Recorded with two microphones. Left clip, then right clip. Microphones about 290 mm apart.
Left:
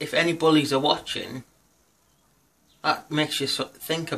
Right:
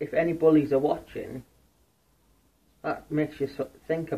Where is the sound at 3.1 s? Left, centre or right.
Centre.